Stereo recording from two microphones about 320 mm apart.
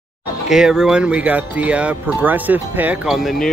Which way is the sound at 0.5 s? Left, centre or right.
Centre.